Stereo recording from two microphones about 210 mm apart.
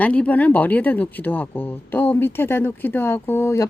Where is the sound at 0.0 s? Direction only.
5° left (ahead or behind).